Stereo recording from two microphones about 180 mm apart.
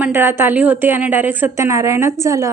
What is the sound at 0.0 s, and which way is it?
A woman's voice, 10° right (ahead or behind).